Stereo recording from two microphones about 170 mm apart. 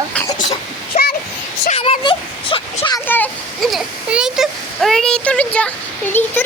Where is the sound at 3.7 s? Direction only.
5° right (ahead or behind).